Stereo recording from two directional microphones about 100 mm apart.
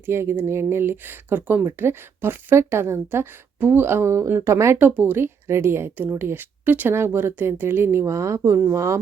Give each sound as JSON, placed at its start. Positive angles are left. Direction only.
{"t": 0.0, "sound": "speech", "side_deg": -25}